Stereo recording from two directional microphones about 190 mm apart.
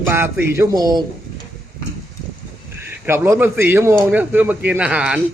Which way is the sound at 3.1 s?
15° right (ahead or behind).